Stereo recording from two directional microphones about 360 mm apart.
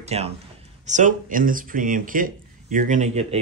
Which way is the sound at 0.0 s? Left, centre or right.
Centre.